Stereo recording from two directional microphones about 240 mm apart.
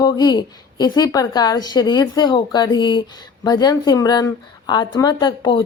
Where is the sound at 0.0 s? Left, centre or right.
Centre.